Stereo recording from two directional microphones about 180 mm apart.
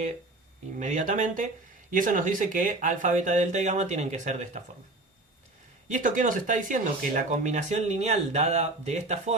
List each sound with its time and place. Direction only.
0.8 s speech: 45° right (ahead or behind)
5.9 s speech: 45° right (ahead or behind)